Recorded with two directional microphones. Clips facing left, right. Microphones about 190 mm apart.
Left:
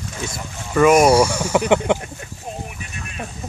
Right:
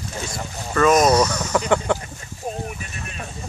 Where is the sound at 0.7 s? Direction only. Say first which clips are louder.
Left 3 dB; 10° left (ahead or behind).